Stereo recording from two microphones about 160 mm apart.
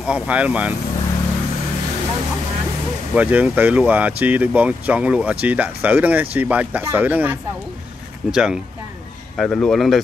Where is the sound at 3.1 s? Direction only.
10° right (ahead or behind).